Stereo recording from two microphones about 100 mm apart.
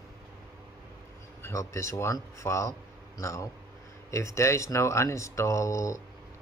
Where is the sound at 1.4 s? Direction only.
30° left (ahead or behind).